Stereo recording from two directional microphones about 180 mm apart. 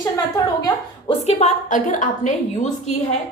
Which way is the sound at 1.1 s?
35° left (ahead or behind).